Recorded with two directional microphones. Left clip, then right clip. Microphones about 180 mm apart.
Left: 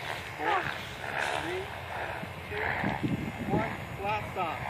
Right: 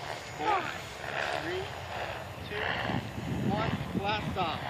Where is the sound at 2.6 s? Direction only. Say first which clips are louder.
Left 1 dB; 25° right (ahead or behind).